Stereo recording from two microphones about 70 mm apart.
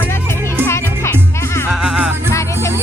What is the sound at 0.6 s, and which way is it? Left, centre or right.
Music, left.